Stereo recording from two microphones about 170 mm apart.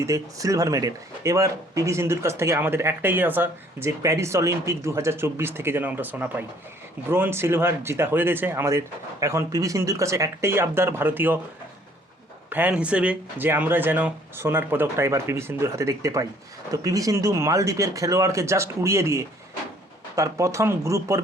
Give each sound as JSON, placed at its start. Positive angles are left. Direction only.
{"t": 0.0, "sound": "speech", "side_deg": -20}
{"t": 12.5, "sound": "speech", "side_deg": -10}